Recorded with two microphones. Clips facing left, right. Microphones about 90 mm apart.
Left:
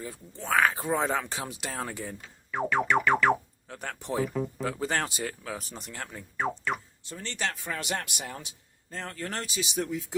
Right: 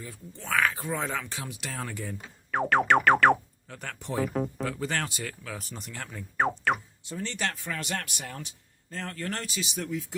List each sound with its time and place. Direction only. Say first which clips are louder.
0.3 s speech: left 2 dB; 20° left (ahead or behind)
2.5 s music: right 3 dB; 65° right (ahead or behind)
3.8 s speech: left 2 dB; 10° left (ahead or behind)
4.2 s speech: right 2 dB; 50° right (ahead or behind)
4.6 s speech: left 1 dB; 15° left (ahead or behind)
4.9 s speech: left 2 dB; 25° left (ahead or behind)
5.5 s speech: left 1 dB; centre (ahead or behind)
6.3 s speech: right 4 dB; 65° right (ahead or behind)
7.0 s speech: right 1 dB; 10° right (ahead or behind)
7.7 s speech: left 1 dB; 15° left (ahead or behind)